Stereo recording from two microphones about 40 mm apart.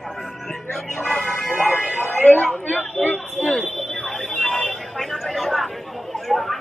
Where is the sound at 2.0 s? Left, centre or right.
Left.